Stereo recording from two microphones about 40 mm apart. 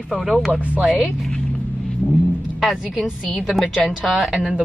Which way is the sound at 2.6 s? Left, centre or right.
Centre.